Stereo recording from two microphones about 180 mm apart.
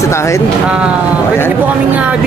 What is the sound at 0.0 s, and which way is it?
Speech, 15° left (ahead or behind).